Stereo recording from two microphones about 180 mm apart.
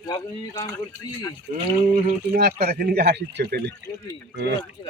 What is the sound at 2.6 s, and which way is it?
Speech, 60° right (ahead or behind).